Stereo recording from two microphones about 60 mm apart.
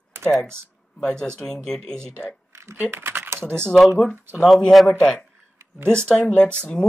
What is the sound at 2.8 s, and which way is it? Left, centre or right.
Speech, right.